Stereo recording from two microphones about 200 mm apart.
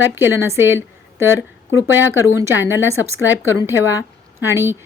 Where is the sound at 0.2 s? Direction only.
10° right (ahead or behind).